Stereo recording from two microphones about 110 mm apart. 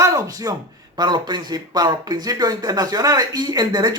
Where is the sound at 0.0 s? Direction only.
30° right (ahead or behind).